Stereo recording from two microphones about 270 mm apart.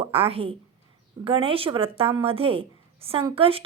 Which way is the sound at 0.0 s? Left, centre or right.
Right.